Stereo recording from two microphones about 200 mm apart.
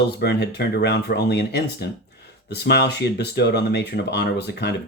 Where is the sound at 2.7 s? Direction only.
55° left (ahead or behind).